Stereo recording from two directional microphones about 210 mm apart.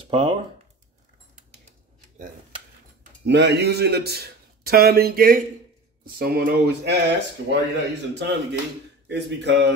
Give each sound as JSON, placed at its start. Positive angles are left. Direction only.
{"t": 3.3, "sound": "speech", "side_deg": -55}